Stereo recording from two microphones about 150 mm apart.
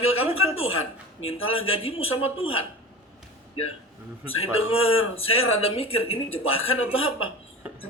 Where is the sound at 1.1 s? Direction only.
40° left (ahead or behind).